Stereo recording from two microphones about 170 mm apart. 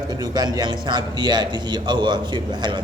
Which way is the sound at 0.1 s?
25° right (ahead or behind).